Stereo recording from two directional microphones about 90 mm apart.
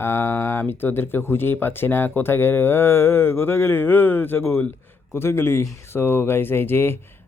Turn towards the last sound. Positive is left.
turn(degrees=25)  # may be behind; listen again after turning